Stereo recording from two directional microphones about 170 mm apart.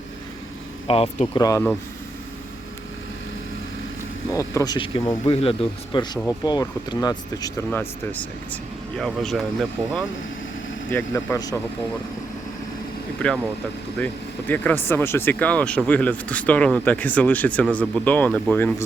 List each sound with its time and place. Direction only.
0.9 s speech: 35° left (ahead or behind)
1.4 s speech: 20° left (ahead or behind)
4.3 s speech: 20° left (ahead or behind)
7.7 s speech: 10° left (ahead or behind)
10.9 s speech: 15° left (ahead or behind)
14.0 s speech: 10° left (ahead or behind)